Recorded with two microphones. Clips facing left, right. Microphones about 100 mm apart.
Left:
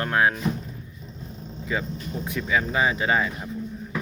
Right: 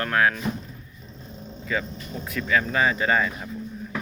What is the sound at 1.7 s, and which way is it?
Speech, 20° left (ahead or behind).